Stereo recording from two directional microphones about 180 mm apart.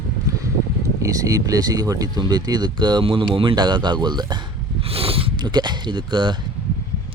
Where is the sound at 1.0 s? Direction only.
20° right (ahead or behind).